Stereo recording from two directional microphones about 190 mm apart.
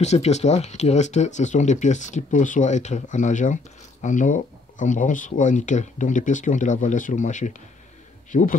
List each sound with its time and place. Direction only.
0.0 s speech: 35° left (ahead or behind)